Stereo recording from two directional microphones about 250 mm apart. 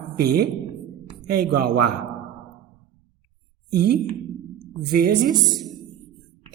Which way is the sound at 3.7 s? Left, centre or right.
Right.